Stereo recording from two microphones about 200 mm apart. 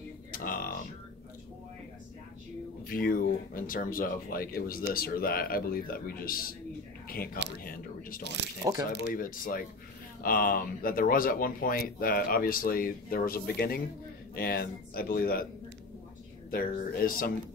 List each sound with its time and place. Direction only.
0.3 s a sound: 45° left (ahead or behind)
2.9 s speech: 45° left (ahead or behind)
7.6 s a sound: 45° left (ahead or behind)
8.2 s speech: 60° right (ahead or behind)
9.0 s speech: 45° left (ahead or behind)
16.4 s speech: 45° left (ahead or behind)